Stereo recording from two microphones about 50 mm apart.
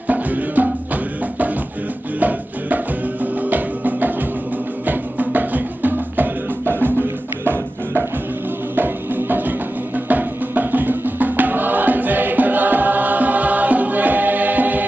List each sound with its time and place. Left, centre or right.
0.1 s music: right
2.1 s music: right